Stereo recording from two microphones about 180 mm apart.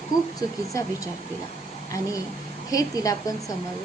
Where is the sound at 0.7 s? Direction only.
15° left (ahead or behind).